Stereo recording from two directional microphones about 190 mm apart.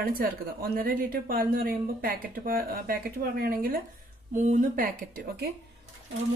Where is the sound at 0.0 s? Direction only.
50° right (ahead or behind).